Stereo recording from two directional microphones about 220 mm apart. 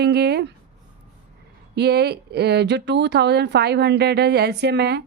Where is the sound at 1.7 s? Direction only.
50° right (ahead or behind).